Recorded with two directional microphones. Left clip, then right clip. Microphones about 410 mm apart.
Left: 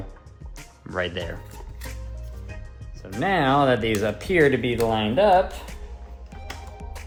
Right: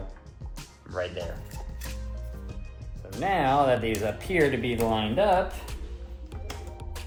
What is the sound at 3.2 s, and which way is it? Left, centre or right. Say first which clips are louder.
Speech: left 3 dB; left.